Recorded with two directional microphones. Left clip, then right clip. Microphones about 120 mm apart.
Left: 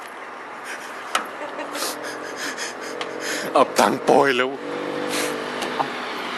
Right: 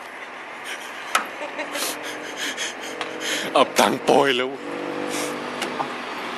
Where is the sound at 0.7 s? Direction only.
10° right (ahead or behind).